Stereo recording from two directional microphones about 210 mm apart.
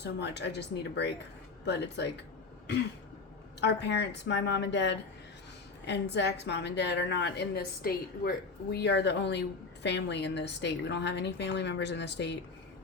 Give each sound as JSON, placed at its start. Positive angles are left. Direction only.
{"t": 0.0, "sound": "a woman's voice", "side_deg": 55}
{"t": 3.6, "sound": "a woman's voice", "side_deg": 55}